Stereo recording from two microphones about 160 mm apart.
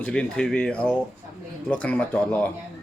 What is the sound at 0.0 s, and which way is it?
Speech, 5° left (ahead or behind).